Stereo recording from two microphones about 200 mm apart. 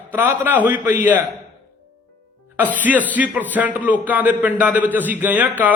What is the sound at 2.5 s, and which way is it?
A man's voice, 10° right (ahead or behind).